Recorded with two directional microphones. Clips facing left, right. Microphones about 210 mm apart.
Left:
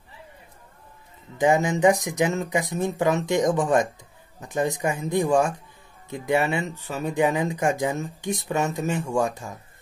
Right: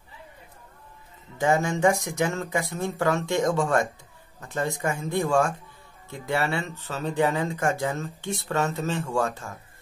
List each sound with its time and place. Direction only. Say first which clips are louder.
1.4 s speech: left 3 dB; 15° left (ahead or behind)